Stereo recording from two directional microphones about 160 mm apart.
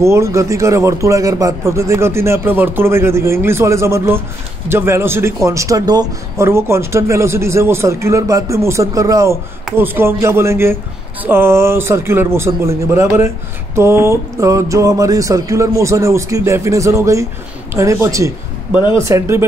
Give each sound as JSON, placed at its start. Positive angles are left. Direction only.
{"t": 0.0, "sound": "speech", "side_deg": -15}
{"t": 13.7, "sound": "a sound", "side_deg": -15}
{"t": 19.0, "sound": "speech", "side_deg": -15}